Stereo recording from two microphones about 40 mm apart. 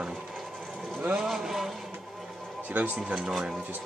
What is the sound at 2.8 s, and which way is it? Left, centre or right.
Speech, right.